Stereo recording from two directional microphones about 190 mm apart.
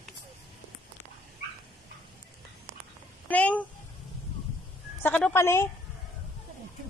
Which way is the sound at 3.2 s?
10° left (ahead or behind).